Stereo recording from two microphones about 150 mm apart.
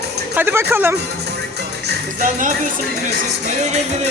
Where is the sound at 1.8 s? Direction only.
60° right (ahead or behind).